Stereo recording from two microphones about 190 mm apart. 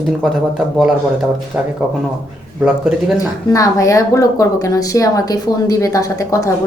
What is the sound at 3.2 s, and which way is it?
Speech, 20° left (ahead or behind).